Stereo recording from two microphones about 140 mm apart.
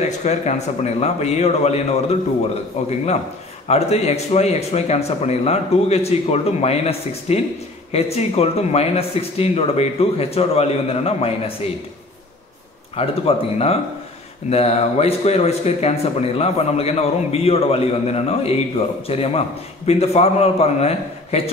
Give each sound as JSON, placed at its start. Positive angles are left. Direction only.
{"t": 0.2, "sound": "speech", "side_deg": 55}
{"t": 13.0, "sound": "speech", "side_deg": 45}
{"t": 14.5, "sound": "speech", "side_deg": 50}